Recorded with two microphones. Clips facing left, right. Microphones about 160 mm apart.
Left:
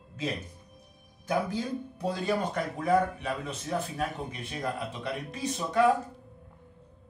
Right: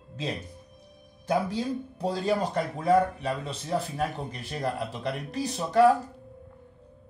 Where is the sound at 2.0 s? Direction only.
30° right (ahead or behind).